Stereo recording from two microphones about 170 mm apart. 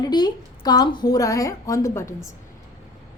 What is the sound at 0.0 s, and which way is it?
A woman's voice, 25° left (ahead or behind).